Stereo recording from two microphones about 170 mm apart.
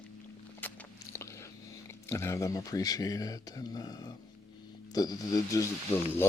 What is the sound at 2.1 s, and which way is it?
Speech, 15° left (ahead or behind).